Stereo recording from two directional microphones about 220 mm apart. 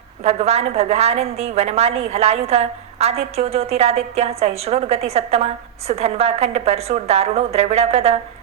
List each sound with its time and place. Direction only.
0.3 s a woman's voice: 30° right (ahead or behind)